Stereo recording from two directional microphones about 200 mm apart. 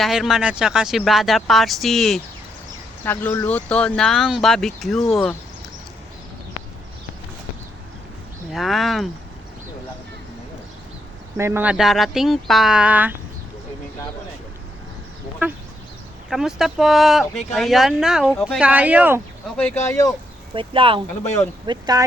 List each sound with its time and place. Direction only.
0.0 s speech: centre (ahead or behind)
8.5 s speech: centre (ahead or behind)
11.3 s speech: 10° right (ahead or behind)
16.3 s speech: centre (ahead or behind)
19.5 s speech: 5° left (ahead or behind)
20.5 s speech: 25° right (ahead or behind)